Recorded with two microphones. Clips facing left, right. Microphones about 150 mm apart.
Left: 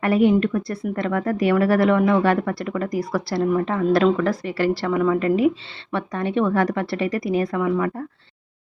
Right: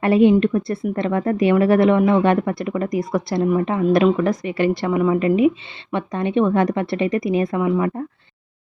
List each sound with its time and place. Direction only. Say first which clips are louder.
0.0 s speech: right 3 dB; 25° right (ahead or behind)